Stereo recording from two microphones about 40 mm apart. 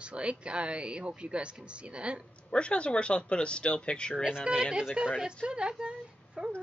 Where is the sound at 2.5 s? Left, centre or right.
Left.